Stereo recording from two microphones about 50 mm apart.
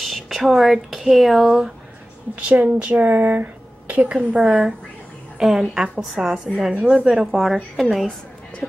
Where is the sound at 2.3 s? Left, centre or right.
Right.